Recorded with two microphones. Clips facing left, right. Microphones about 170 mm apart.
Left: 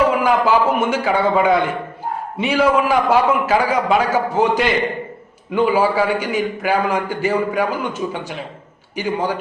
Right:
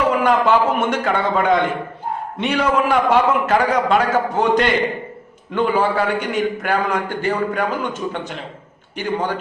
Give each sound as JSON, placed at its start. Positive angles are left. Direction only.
{"t": 0.2, "sound": "a man's voice", "side_deg": 5}